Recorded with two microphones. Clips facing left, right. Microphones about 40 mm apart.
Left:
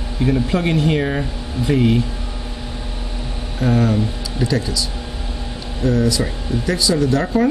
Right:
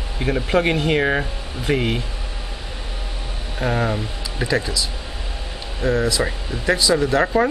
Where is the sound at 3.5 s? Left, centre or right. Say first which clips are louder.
Left 4 dB; right.